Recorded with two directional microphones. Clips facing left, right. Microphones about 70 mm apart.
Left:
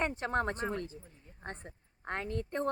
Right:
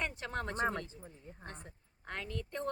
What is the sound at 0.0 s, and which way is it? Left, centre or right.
Speech, left.